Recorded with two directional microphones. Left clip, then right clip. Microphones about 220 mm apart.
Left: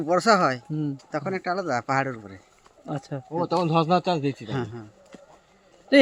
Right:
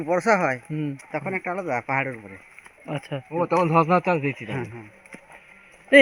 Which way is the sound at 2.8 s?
10° left (ahead or behind).